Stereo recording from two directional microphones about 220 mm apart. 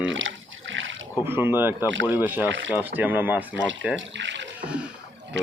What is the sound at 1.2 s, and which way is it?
Speech, 10° right (ahead or behind).